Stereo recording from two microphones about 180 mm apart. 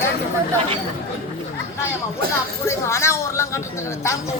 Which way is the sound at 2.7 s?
15° left (ahead or behind).